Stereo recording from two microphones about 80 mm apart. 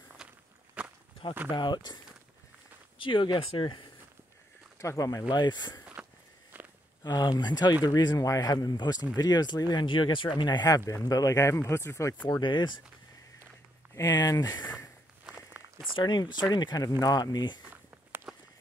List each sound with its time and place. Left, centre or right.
0.2 s walk: centre
1.5 s speech: left
3.0 s speech: left
4.7 s speech: left
5.3 s speech: left
6.0 s walk: centre
7.0 s speech: left
11.1 s speech: left
12.3 s speech: left
14.0 s speech: left
16.0 s speech: left
16.5 s speech: left
18.3 s walk: centre